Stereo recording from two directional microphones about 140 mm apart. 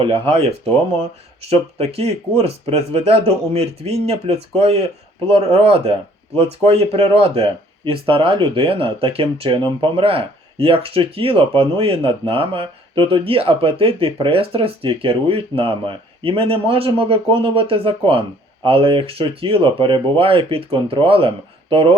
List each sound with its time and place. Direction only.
0.0 s speech: 45° right (ahead or behind)
1.5 s speech: 45° right (ahead or behind)